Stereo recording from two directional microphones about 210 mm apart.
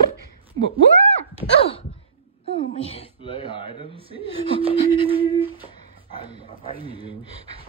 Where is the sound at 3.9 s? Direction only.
25° right (ahead or behind).